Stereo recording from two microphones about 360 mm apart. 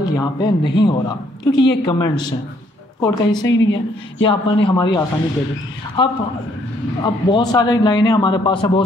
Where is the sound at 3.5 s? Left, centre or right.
Left.